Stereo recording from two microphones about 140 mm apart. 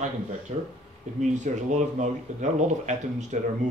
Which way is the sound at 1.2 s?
60° right (ahead or behind).